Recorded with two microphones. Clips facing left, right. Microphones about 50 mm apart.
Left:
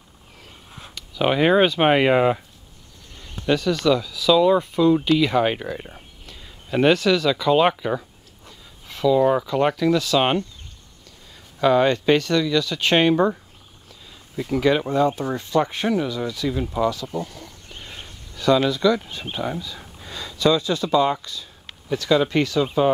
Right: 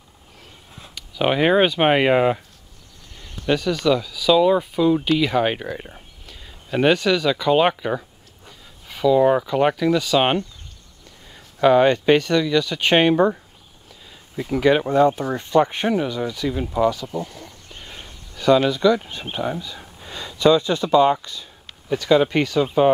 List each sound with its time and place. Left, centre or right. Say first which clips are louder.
0.9 s speech: even; centre
3.4 s speech: even; centre
17.2 s a sound: even; centre
20.3 s speech: right 3 dB; right